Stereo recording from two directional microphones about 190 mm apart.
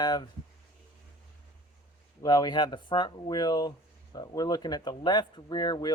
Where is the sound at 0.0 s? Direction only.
20° left (ahead or behind).